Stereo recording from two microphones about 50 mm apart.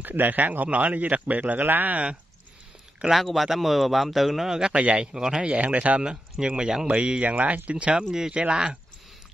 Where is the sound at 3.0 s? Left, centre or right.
Centre; by 5.1 s right.